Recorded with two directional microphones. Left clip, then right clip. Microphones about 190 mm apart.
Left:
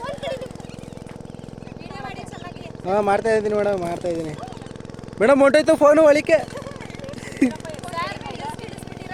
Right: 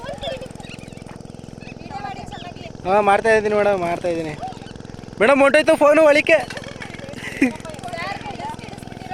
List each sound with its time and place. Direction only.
0.0 s a sound: 5° right (ahead or behind)
2.8 s speech: centre (ahead or behind)
7.3 s vehicle: centre (ahead or behind)